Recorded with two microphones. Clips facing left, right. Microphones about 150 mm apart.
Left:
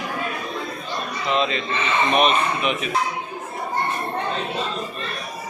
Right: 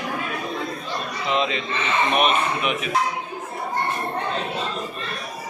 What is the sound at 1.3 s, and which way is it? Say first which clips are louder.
Speech: left 1 dB; 15° right (ahead or behind).